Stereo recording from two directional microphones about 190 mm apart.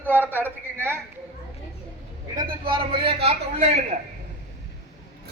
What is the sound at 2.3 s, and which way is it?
A man's voice, 25° right (ahead or behind).